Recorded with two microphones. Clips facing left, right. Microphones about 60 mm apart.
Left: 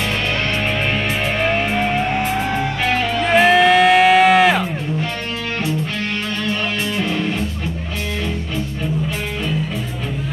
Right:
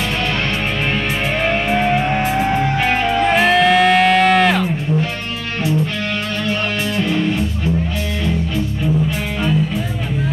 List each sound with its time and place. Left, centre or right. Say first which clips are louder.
2.9 s music: right 1 dB; right
3.3 s music: left 2 dB; centre
7.0 s music: right 4 dB; centre